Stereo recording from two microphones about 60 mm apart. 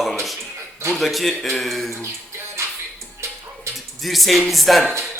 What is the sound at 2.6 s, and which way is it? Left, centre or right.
Music, right.